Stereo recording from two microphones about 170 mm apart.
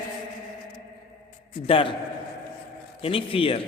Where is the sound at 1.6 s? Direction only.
30° left (ahead or behind).